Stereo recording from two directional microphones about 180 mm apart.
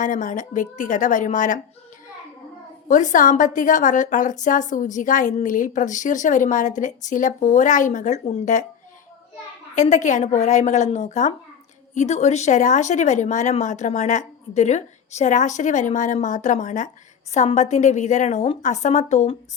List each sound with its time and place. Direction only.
0.0 s a woman's voice: 45° left (ahead or behind)
2.8 s a woman's voice: 45° left (ahead or behind)
9.7 s speech: 40° left (ahead or behind)